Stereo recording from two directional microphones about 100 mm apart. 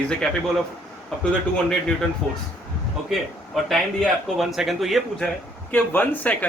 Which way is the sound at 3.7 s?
Centre (ahead or behind).